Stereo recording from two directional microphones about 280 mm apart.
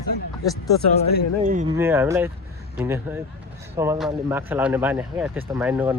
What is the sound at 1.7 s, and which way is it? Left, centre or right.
Speech, centre.